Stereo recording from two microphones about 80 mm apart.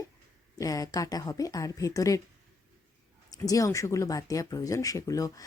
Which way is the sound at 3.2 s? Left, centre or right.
Left.